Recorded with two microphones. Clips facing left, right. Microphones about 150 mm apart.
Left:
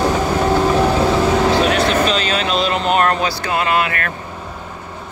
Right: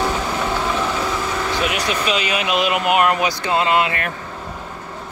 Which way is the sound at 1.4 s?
90° left.